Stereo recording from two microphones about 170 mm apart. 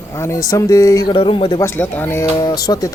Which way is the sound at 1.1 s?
30° left (ahead or behind).